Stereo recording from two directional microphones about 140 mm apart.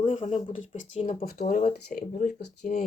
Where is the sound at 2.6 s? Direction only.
75° left (ahead or behind).